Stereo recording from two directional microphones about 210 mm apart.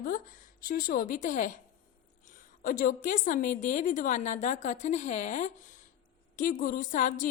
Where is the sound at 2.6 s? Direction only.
40° left (ahead or behind).